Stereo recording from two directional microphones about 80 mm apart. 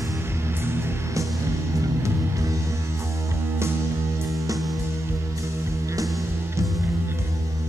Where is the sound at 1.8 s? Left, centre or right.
Right.